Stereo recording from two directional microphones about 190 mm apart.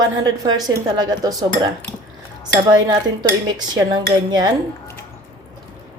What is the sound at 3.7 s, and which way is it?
Speech, 20° right (ahead or behind).